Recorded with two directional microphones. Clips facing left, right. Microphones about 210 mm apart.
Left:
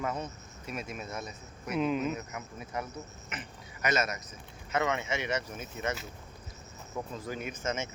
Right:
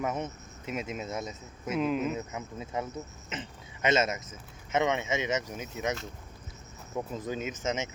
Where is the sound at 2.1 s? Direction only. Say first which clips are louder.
Right 4 dB; 20° right (ahead or behind).